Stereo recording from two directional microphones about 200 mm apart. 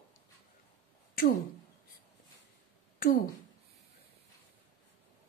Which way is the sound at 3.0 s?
45° left (ahead or behind).